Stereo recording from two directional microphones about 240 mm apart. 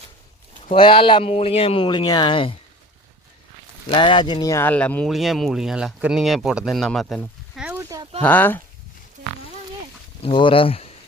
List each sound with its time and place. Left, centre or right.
0.7 s speech: left
3.9 s speech: centre
8.2 s speech: centre
10.2 s speech: left